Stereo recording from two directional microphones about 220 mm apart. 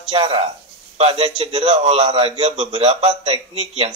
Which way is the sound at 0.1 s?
25° right (ahead or behind).